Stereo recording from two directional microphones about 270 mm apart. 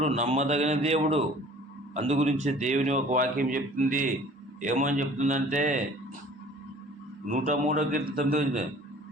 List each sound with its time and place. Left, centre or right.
0.0 s speech: right
7.3 s speech: right